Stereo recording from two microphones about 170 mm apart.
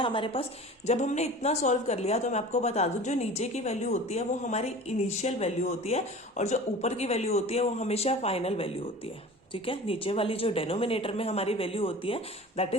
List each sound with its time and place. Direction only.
0.0 s speech: 30° left (ahead or behind)
0.9 s speech: 45° left (ahead or behind)